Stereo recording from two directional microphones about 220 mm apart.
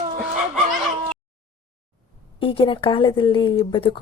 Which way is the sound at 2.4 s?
25° left (ahead or behind).